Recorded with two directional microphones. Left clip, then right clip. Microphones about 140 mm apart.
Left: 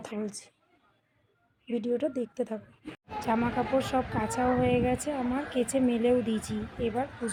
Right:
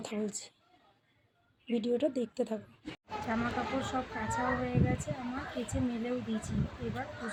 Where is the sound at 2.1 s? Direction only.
50° left (ahead or behind).